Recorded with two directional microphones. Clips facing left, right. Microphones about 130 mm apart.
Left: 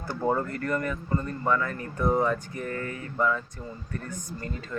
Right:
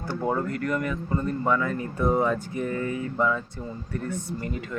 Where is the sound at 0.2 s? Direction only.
Centre (ahead or behind).